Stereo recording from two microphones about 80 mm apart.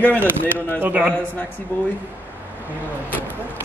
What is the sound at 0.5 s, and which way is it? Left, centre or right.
Speech, left.